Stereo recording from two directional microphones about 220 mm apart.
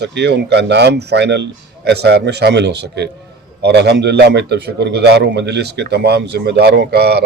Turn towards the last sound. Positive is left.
turn(degrees=-45)  # may be behind; listen again after turning